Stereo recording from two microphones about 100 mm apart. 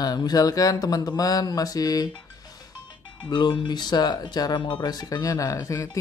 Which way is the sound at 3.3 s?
50° left (ahead or behind).